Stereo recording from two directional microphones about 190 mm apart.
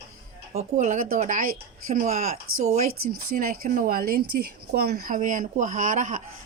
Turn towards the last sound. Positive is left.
turn(degrees=-40)  # may be behind; listen again after turning